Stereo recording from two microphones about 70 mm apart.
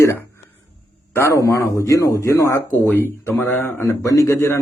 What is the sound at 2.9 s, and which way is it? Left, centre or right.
A man's voice, left.